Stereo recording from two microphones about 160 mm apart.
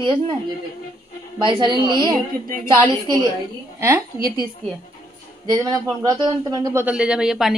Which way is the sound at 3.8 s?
20° right (ahead or behind).